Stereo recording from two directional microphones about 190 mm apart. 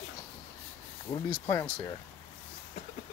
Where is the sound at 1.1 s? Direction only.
15° left (ahead or behind).